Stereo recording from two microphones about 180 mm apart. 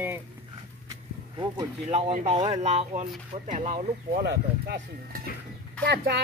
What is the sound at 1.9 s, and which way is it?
Speech, 35° right (ahead or behind).